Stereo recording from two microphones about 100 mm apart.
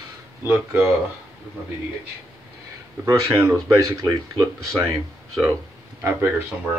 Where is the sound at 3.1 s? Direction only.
35° right (ahead or behind).